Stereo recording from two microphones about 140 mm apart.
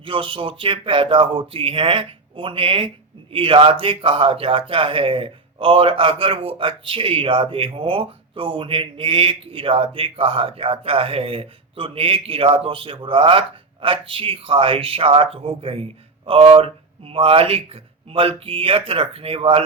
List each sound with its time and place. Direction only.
0.0 s speech: 35° right (ahead or behind)